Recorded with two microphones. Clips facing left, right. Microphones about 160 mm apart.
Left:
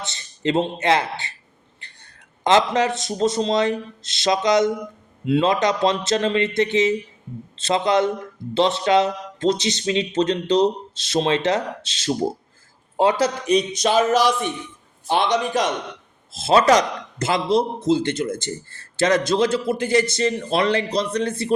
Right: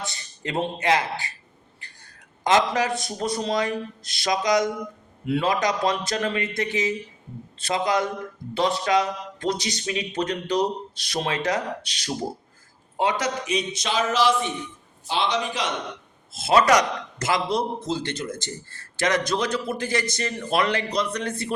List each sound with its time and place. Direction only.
0.0 s a man's voice: 25° left (ahead or behind)
2.4 s a man's voice: 25° left (ahead or behind)
13.8 s a man's voice: 50° left (ahead or behind)
16.4 s a man's voice: 25° left (ahead or behind)